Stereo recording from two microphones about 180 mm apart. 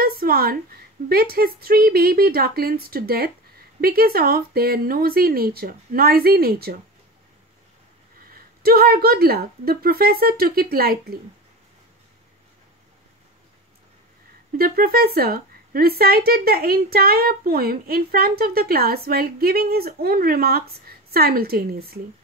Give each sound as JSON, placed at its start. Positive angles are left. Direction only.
{"t": 0.0, "sound": "a sound", "side_deg": -55}
{"t": 1.0, "sound": "a woman's voice", "side_deg": -55}
{"t": 8.3, "sound": "a woman's voice", "side_deg": -55}
{"t": 14.6, "sound": "a woman's voice", "side_deg": -55}